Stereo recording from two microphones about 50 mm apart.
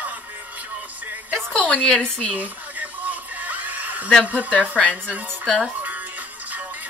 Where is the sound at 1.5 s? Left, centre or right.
Left.